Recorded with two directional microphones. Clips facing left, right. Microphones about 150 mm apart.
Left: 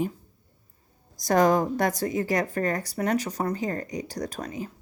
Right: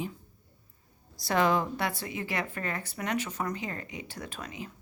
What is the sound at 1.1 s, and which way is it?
Speech, 45° left (ahead or behind).